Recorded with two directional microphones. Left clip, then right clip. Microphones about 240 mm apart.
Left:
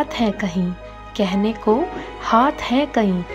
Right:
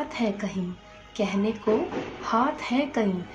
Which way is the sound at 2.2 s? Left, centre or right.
Left.